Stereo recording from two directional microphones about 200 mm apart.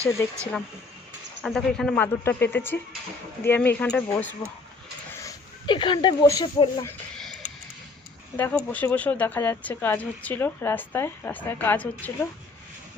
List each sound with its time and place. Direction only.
0.2 s speech: 10° left (ahead or behind)
1.4 s speech: centre (ahead or behind)
5.2 s speech: 20° left (ahead or behind)
7.4 s a sound: 35° left (ahead or behind)
8.4 s speech: 10° left (ahead or behind)